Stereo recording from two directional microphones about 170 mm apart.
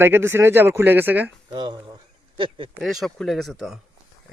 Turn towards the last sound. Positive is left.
turn(degrees=0)  # may be behind; listen again after turning